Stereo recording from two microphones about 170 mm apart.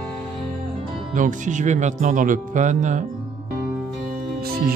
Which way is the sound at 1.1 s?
50° right (ahead or behind).